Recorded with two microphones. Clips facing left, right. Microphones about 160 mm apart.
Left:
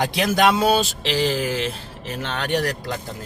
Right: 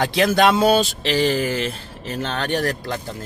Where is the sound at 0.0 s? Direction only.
5° left (ahead or behind).